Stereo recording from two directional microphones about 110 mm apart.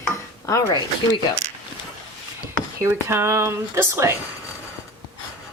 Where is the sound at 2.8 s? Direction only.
25° right (ahead or behind).